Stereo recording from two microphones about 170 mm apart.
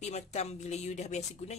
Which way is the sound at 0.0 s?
40° left (ahead or behind).